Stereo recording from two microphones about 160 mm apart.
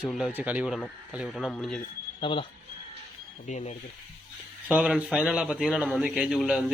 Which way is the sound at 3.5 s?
50° left (ahead or behind).